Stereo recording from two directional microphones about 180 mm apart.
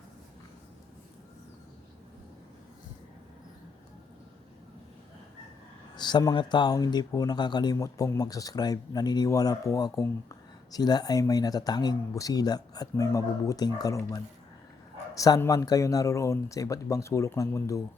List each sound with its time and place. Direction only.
6.0 s speech: 25° left (ahead or behind)